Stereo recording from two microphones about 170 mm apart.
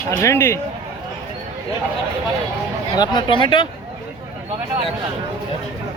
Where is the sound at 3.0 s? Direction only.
25° left (ahead or behind).